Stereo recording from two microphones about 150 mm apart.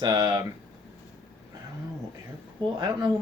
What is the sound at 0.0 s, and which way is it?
Speech, 25° right (ahead or behind).